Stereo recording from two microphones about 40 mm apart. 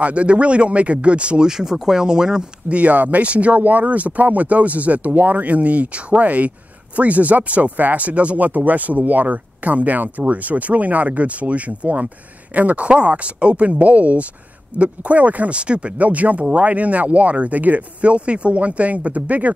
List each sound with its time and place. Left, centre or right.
0.0 s speech: right
1.5 s speech: centre
2.7 s speech: right